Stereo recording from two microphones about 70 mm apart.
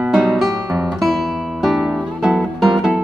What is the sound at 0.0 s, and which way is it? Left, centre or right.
Guitar, centre.